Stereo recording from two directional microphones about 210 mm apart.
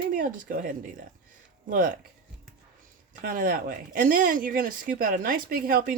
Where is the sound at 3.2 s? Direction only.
40° right (ahead or behind).